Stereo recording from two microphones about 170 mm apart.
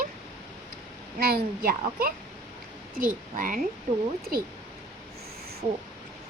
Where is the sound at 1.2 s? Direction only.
60° right (ahead or behind).